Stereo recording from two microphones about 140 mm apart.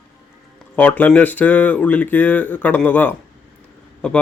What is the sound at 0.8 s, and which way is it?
Speech, 10° left (ahead or behind).